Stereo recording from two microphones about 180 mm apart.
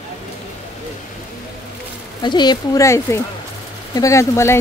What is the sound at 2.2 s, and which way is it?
Speech, 25° left (ahead or behind).